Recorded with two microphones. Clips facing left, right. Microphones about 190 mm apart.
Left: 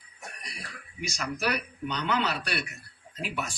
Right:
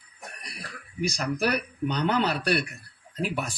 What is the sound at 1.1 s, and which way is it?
Speech, 35° right (ahead or behind).